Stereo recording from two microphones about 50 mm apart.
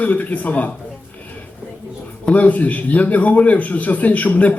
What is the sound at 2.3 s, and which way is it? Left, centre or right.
A man's voice, left.